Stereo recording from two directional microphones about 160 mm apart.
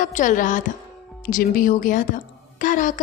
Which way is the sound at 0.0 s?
50° left (ahead or behind).